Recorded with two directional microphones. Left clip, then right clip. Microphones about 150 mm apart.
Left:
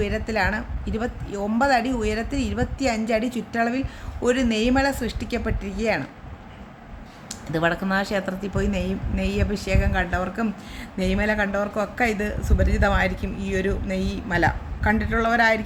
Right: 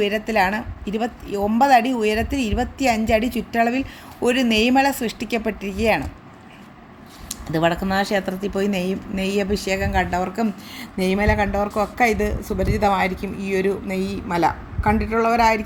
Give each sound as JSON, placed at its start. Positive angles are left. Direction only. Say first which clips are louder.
{"t": 0.0, "sound": "a woman's voice", "louder": "right 5 dB", "side_deg": -25}
{"t": 7.3, "sound": "speech", "louder": "right 3 dB", "side_deg": -20}